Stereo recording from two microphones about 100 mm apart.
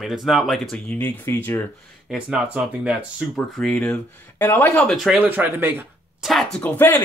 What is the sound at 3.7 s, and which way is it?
Speech, 15° left (ahead or behind).